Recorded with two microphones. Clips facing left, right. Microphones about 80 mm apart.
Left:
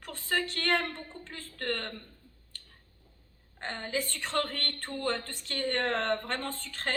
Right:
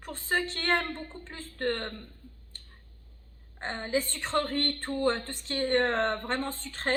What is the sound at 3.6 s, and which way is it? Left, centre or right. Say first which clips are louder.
A woman's voice: right 4 dB; right.